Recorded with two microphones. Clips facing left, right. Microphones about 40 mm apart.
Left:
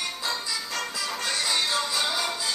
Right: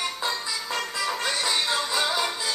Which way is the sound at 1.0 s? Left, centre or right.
Right.